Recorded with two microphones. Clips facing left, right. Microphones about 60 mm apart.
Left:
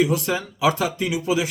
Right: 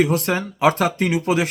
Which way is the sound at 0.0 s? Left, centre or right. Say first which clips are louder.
Right 2 dB; right.